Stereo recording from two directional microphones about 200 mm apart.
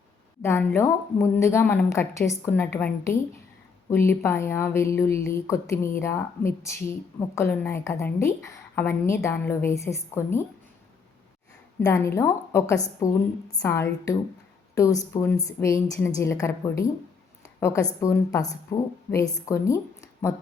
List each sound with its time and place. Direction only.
0.4 s speech: 10° left (ahead or behind)
11.8 s a woman's voice: 15° left (ahead or behind)